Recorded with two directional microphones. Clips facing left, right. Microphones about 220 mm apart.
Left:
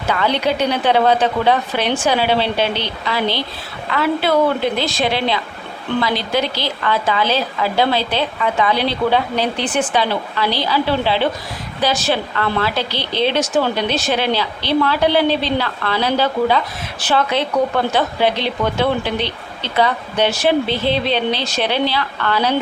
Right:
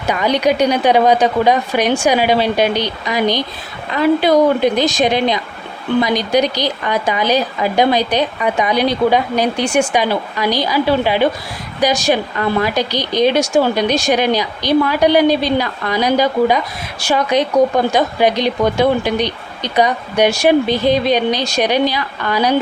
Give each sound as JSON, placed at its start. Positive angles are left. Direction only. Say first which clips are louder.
{"t": 0.1, "sound": "a woman's voice", "louder": "right 3 dB", "side_deg": -15}